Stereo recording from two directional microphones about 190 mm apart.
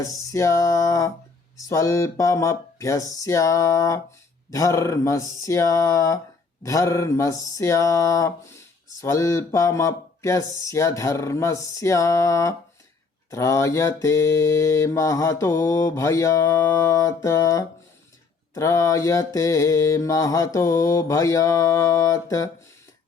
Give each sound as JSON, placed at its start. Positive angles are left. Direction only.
{"t": 0.0, "sound": "mantra", "side_deg": 15}